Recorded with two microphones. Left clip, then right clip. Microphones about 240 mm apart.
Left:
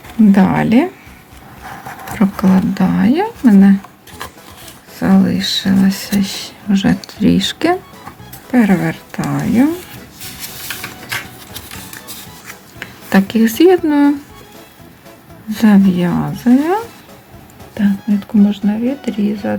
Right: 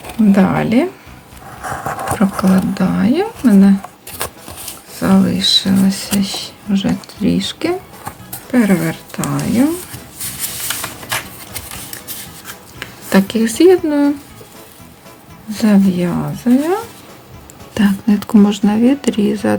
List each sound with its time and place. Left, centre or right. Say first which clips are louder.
0.3 s speech: even; centre
2.1 s speech: left 3 dB; centre
4.9 s speech: even; centre
12.8 s speech: even; centre
15.5 s speech: left 2 dB; centre
17.7 s speech: right 2 dB; right